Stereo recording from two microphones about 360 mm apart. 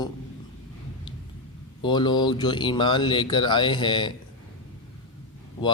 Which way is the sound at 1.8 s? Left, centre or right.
Centre.